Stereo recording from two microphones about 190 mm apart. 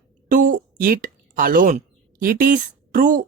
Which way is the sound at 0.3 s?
45° right (ahead or behind).